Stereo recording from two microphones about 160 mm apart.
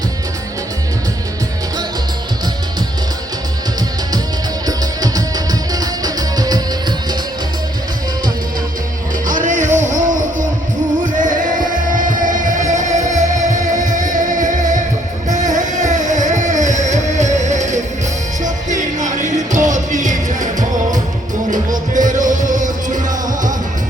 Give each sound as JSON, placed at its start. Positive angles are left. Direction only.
{"t": 4.6, "sound": "music", "side_deg": -25}
{"t": 9.2, "sound": "music", "side_deg": -55}
{"t": 21.9, "sound": "music", "side_deg": -55}